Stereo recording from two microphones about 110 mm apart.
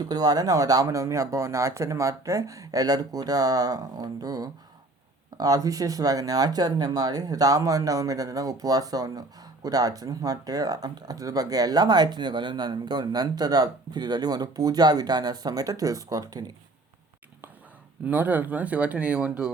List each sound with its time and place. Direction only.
0.0 s speech: 35° right (ahead or behind)
18.0 s speech: 15° right (ahead or behind)